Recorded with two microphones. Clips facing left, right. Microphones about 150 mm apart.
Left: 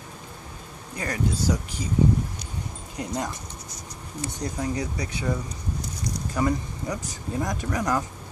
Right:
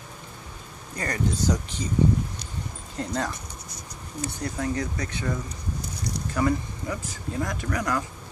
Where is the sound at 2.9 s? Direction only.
15° left (ahead or behind).